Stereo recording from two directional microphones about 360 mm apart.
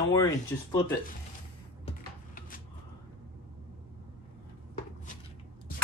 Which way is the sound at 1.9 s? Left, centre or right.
Left.